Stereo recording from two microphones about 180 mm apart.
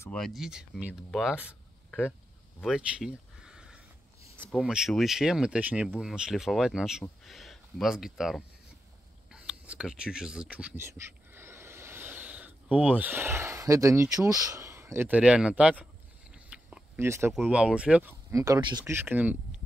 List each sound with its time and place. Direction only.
0.0 s speech: 5° left (ahead or behind)
1.5 s a sound: 5° right (ahead or behind)
4.5 s speech: 5° right (ahead or behind)
9.3 s a sound: 5° right (ahead or behind)
17.3 s speech: 5° right (ahead or behind)
18.3 s speech: 20° right (ahead or behind)
18.9 s speech: 10° right (ahead or behind)